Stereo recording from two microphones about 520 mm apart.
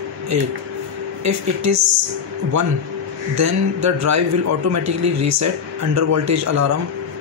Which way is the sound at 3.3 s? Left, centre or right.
Right.